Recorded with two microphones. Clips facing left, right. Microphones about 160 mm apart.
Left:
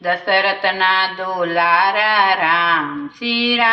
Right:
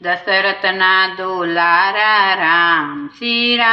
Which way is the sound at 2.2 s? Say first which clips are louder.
Even; 15° left (ahead or behind).